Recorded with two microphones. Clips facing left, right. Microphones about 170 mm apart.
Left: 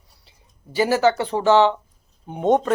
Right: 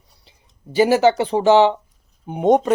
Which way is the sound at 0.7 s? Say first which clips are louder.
Right 4 dB; 20° right (ahead or behind).